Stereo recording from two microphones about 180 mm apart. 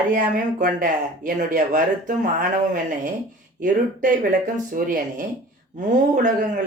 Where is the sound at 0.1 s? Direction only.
50° right (ahead or behind).